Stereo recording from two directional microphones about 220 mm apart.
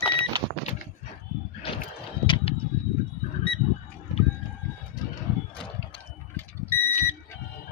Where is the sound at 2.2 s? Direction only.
25° left (ahead or behind).